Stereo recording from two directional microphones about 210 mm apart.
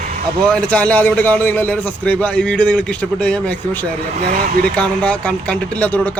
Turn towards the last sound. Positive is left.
turn(degrees=5)  # may be behind; listen again after turning